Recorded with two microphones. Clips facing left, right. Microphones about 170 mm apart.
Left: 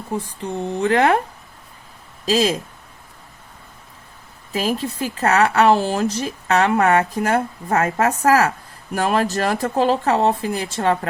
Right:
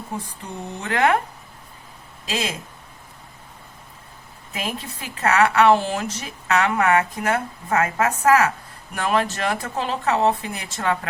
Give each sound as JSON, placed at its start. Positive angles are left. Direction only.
{"t": 0.2, "sound": "speech", "side_deg": 30}
{"t": 2.2, "sound": "speech", "side_deg": 35}
{"t": 4.5, "sound": "speech", "side_deg": 35}